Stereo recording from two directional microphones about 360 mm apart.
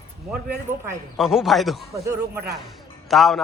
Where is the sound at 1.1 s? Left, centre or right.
Centre.